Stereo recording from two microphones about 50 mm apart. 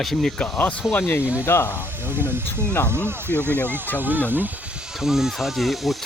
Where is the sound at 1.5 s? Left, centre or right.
Left.